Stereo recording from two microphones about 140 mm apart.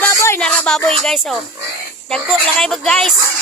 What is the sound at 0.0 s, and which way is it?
Music, 20° left (ahead or behind).